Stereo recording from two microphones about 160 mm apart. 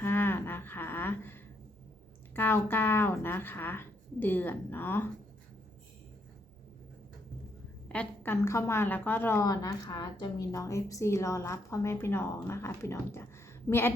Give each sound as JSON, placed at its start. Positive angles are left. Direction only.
{"t": 0.0, "sound": "a sound", "side_deg": 15}
{"t": 2.3, "sound": "a woman's voice", "side_deg": 15}
{"t": 7.9, "sound": "a woman's voice", "side_deg": 15}